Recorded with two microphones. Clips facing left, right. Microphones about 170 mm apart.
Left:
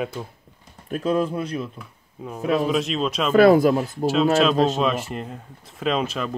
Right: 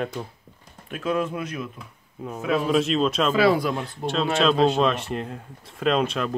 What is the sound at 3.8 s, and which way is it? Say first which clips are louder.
Speech: left 6 dB; 5° left (ahead or behind).